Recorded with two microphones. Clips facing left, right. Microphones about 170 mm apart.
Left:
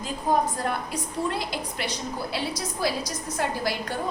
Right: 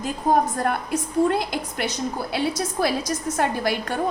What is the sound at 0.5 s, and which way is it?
A woman's voice, 50° right (ahead or behind).